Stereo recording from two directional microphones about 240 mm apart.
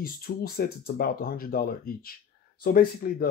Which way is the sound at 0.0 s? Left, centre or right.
Left.